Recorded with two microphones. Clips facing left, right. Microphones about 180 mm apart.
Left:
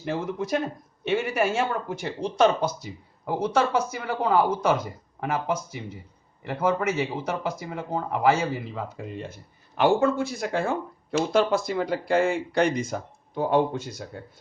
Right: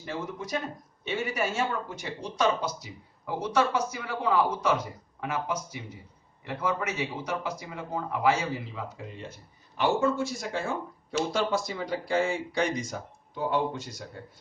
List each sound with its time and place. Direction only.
0.0 s speech: 60° left (ahead or behind)